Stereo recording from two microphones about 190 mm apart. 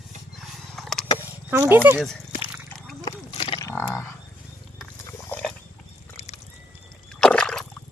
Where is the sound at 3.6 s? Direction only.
15° left (ahead or behind).